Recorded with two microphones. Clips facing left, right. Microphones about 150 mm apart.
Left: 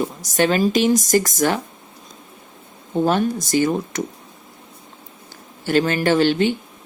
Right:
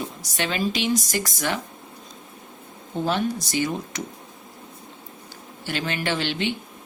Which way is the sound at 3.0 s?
45° left (ahead or behind).